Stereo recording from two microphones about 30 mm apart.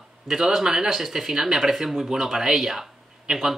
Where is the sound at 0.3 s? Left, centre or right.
Centre.